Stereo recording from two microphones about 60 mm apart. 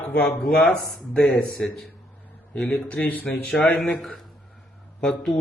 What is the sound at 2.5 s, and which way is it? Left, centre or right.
Speech, centre.